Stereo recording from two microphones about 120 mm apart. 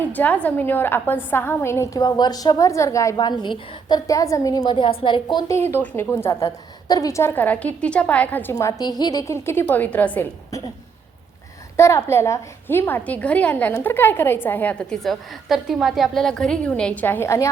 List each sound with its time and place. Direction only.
0.1 s a woman's voice: 15° left (ahead or behind); by 5.5 s 40° left (ahead or behind)
5.5 s a woman's voice: 20° left (ahead or behind)
6.8 s a woman's voice: 30° left (ahead or behind); by 8.5 s 15° left (ahead or behind)
8.5 s a woman's voice: 30° left (ahead or behind); by 10.2 s 10° left (ahead or behind)
11.8 s a woman's voice: 20° left (ahead or behind)